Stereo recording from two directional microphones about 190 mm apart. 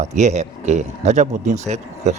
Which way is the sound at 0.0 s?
35° right (ahead or behind).